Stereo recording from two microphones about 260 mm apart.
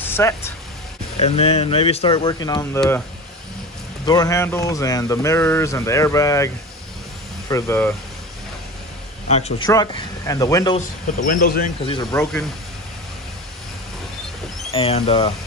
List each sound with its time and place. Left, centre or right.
0.0 s a sound: centre
1.1 s speech: left
4.0 s speech: centre
9.3 s speech: left
9.7 s speech: centre
11.1 s speech: left
11.8 s speech: centre
14.7 s speech: left